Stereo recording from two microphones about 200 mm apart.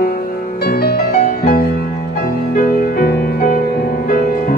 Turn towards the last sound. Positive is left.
turn(degrees=45)  # may be behind; listen again after turning